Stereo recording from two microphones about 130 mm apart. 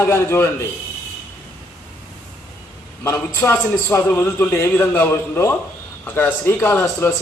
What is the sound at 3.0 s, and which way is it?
A man's voice, 20° left (ahead or behind).